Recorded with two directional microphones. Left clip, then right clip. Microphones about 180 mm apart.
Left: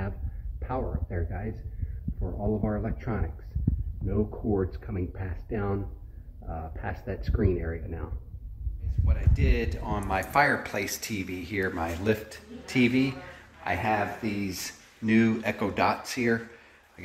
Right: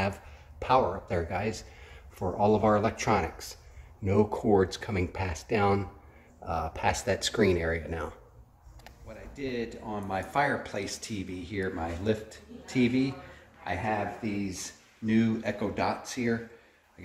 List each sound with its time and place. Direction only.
0.6 s speech: 20° right (ahead or behind)
9.0 s speech: 5° left (ahead or behind)